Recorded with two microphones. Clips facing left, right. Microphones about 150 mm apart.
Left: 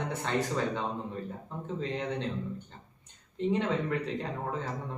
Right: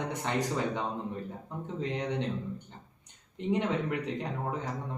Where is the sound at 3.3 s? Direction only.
15° right (ahead or behind).